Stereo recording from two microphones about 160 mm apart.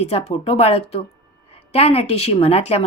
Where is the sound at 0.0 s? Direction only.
40° left (ahead or behind).